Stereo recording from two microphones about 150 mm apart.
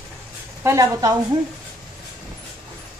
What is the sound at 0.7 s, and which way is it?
Speech, 20° right (ahead or behind).